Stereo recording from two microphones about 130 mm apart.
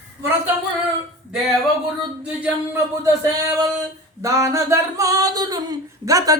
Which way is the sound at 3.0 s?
25° right (ahead or behind).